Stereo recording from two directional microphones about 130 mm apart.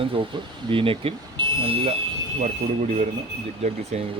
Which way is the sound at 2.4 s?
65° right (ahead or behind).